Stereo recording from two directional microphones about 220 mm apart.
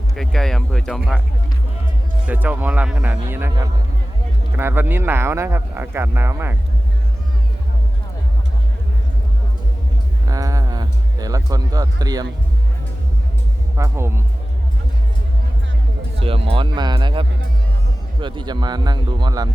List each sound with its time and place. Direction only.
0.2 s speech: centre (ahead or behind)
2.2 s speech: 10° right (ahead or behind)
10.2 s speech: 15° right (ahead or behind)
13.7 s speech: 15° right (ahead or behind)
16.1 s speech: 25° right (ahead or behind)